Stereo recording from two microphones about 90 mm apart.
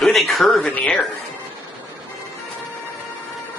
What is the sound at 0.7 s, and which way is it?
Speech, 15° left (ahead or behind).